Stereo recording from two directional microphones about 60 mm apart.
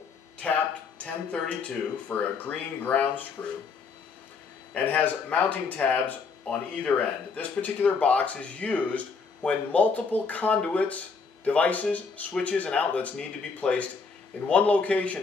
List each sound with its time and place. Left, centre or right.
0.4 s speech: left
4.7 s speech: left